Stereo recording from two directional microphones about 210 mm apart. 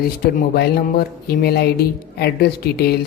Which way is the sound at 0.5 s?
50° left (ahead or behind).